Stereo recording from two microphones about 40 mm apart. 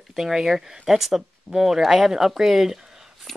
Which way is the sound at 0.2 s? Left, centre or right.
Centre.